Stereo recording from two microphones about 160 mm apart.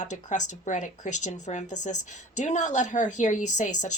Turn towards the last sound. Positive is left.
turn(degrees=50)  # may be behind; listen again after turning